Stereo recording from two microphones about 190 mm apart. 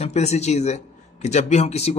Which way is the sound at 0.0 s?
35° left (ahead or behind).